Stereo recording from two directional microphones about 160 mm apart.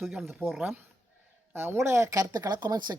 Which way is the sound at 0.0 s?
Centre (ahead or behind).